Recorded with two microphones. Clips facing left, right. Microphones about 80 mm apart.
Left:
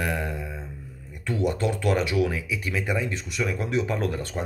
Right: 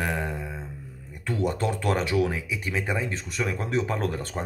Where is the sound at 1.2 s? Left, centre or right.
Right.